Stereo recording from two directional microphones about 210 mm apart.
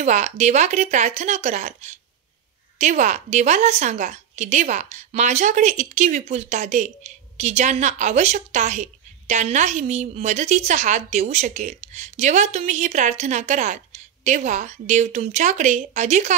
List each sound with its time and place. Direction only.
0.0 s a woman's voice: 30° right (ahead or behind)